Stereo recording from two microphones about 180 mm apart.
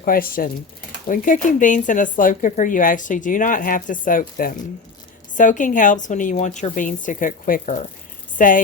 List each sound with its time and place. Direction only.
0.0 s speech: 55° left (ahead or behind)